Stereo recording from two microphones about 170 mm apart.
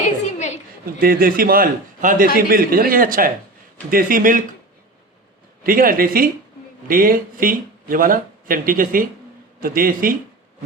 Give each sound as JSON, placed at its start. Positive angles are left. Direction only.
{"t": 0.3, "sound": "a sound", "side_deg": 45}
{"t": 0.9, "sound": "speech", "side_deg": -60}
{"t": 5.6, "sound": "speech", "side_deg": -55}